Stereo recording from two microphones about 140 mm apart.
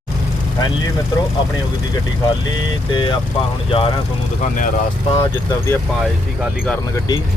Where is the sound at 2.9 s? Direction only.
35° left (ahead or behind).